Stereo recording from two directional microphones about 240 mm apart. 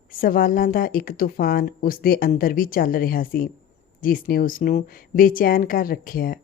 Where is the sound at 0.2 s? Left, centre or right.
Left.